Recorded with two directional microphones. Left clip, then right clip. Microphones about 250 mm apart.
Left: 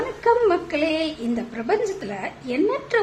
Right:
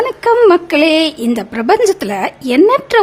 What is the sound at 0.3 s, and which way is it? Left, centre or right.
A woman's voice, right.